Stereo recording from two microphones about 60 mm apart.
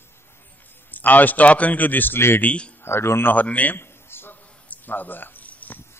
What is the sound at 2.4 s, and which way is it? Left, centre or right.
Speech, centre.